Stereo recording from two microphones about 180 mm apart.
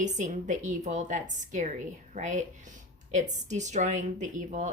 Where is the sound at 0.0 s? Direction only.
40° right (ahead or behind).